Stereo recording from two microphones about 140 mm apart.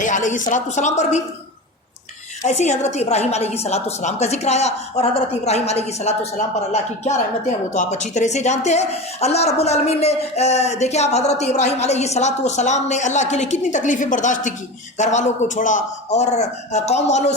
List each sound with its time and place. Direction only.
0.0 s a man's voice: 65° left (ahead or behind)
2.4 s a woman's voice: 55° left (ahead or behind)